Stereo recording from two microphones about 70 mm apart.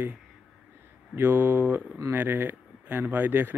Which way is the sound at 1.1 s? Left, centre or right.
Right.